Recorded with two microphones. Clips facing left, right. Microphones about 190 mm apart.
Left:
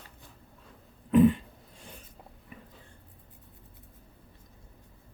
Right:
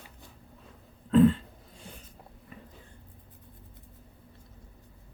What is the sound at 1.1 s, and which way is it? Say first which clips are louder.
Throat clearing: even; 15° left (ahead or behind).